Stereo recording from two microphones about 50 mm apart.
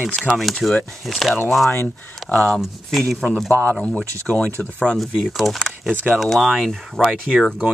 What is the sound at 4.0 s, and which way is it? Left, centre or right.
Speech, left.